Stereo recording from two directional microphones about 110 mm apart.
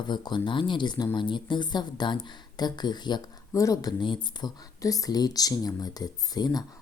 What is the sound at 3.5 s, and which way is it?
Speech, 30° left (ahead or behind).